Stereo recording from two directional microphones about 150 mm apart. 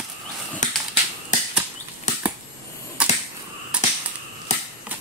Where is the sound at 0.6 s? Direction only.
55° left (ahead or behind).